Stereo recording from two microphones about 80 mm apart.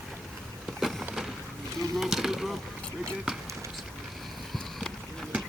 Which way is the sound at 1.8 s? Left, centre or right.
Centre.